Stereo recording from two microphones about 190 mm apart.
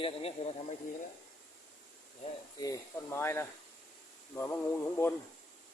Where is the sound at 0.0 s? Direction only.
30° left (ahead or behind).